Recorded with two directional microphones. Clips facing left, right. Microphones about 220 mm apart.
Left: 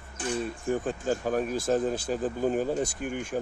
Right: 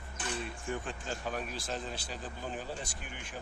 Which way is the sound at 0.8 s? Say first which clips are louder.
Left 11 dB; 45° left (ahead or behind).